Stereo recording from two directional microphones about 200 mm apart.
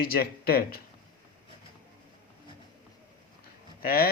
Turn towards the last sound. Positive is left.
turn(degrees=50)  # may be behind; listen again after turning